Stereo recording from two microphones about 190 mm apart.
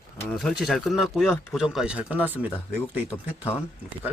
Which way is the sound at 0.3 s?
Centre (ahead or behind).